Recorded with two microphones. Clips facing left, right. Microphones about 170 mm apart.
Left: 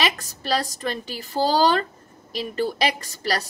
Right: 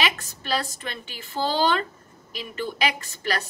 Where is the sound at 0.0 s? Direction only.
40° left (ahead or behind).